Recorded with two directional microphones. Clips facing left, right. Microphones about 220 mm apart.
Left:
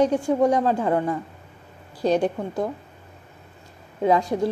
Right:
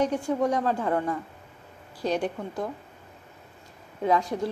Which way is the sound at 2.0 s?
35° left (ahead or behind).